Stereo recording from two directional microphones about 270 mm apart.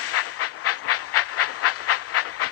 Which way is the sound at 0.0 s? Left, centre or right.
Left.